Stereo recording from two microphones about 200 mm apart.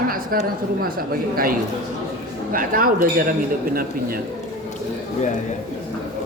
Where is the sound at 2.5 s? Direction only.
45° right (ahead or behind).